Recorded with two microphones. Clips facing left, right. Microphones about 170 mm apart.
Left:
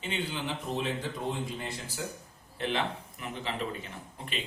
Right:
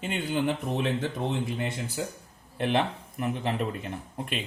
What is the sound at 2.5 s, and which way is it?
Speech, 55° right (ahead or behind).